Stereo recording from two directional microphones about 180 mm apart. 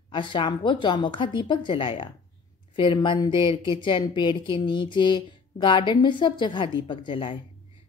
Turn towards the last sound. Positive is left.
turn(degrees=30)  # may be behind; listen again after turning